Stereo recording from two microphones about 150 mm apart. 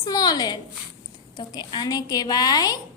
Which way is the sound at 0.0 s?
25° left (ahead or behind).